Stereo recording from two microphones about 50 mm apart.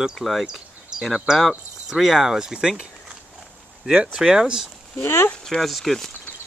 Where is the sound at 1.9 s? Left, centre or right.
Centre.